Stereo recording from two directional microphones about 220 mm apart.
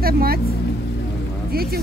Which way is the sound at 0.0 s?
45° right (ahead or behind).